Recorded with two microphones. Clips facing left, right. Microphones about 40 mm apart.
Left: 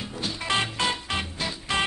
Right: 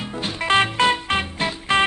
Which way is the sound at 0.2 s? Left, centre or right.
Right.